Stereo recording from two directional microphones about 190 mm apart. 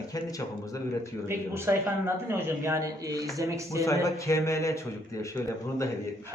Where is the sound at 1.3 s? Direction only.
15° right (ahead or behind).